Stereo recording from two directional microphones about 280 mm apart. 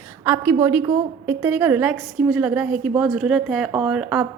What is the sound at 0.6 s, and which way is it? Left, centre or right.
A woman's voice, centre.